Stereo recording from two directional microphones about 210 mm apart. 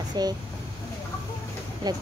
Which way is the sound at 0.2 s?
20° right (ahead or behind).